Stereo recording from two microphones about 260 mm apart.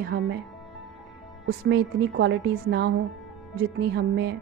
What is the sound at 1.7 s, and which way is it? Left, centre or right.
A woman's voice, right.